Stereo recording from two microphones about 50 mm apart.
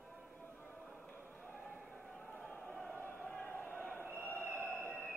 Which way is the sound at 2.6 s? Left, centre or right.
Centre.